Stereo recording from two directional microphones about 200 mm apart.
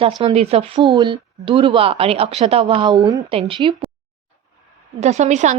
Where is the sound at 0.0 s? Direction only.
30° right (ahead or behind).